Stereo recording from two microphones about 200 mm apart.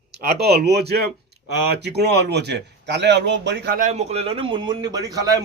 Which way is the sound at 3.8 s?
35° right (ahead or behind).